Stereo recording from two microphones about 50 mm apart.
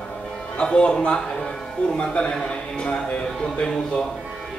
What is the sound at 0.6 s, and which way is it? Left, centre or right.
Speech, centre.